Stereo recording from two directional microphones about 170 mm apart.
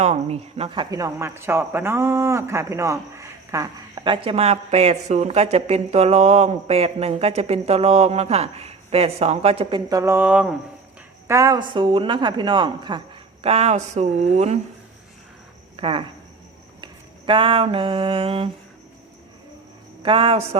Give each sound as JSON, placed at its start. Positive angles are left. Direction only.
{"t": 0.0, "sound": "speech", "side_deg": -40}
{"t": 10.0, "sound": "speech", "side_deg": -15}
{"t": 13.4, "sound": "speech", "side_deg": -40}
{"t": 15.7, "sound": "speech", "side_deg": -30}
{"t": 16.8, "sound": "a sound", "side_deg": -30}
{"t": 20.0, "sound": "speech", "side_deg": -30}